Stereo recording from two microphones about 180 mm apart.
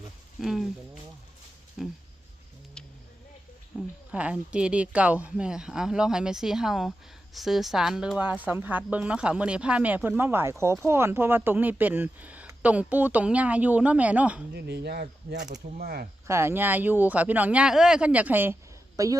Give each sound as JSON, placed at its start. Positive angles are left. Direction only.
{"t": 0.3, "sound": "speech", "side_deg": 0}
{"t": 1.8, "sound": "speech", "side_deg": 0}
{"t": 2.8, "sound": "a sound", "side_deg": 5}
{"t": 3.7, "sound": "a sound", "side_deg": -5}
{"t": 4.1, "sound": "speech", "side_deg": -5}
{"t": 14.5, "sound": "speech", "side_deg": -65}
{"t": 16.2, "sound": "a woman's voice", "side_deg": -15}